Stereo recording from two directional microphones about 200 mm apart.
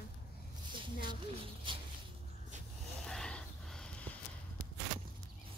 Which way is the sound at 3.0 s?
5° left (ahead or behind).